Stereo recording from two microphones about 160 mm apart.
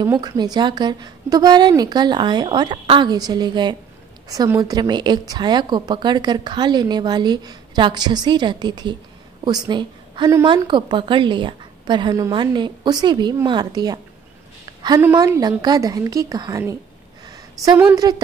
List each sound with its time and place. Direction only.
0.2 s a woman's voice: 25° right (ahead or behind)
15.0 s a woman's voice: 15° right (ahead or behind)
18.0 s a woman's voice: 25° right (ahead or behind)